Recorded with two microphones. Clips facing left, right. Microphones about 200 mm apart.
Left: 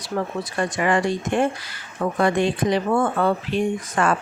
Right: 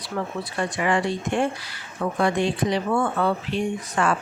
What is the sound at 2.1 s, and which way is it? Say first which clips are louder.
Speech: left 2 dB; 55° left (ahead or behind).